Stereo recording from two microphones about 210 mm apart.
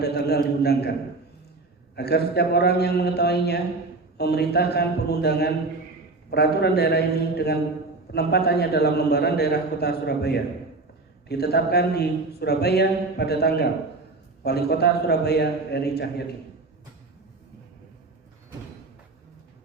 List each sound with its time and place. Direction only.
0.0 s a man's voice: 50° left (ahead or behind)
2.0 s a man's voice: 50° left (ahead or behind)